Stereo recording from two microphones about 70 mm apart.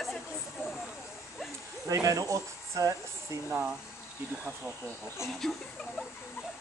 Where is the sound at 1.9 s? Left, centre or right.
Right.